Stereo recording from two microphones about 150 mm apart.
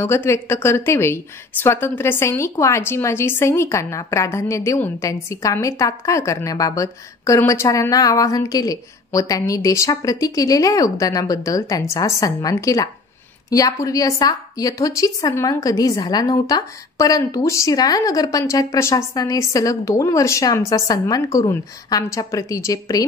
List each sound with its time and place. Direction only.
0.0 s a woman's voice: 15° left (ahead or behind)